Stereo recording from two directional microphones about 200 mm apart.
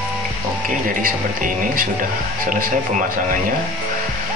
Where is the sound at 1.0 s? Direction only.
45° right (ahead or behind).